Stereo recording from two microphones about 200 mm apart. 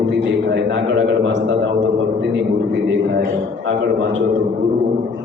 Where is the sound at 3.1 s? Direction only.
60° right (ahead or behind).